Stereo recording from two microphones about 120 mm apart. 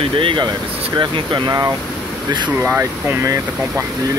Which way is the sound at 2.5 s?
20° right (ahead or behind).